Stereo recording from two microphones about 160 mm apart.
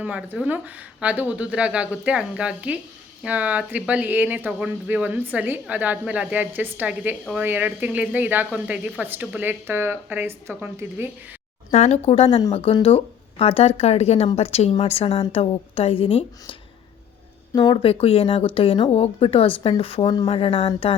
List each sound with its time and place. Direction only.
0.0 s speech: 10° right (ahead or behind)
11.7 s speech: 45° left (ahead or behind)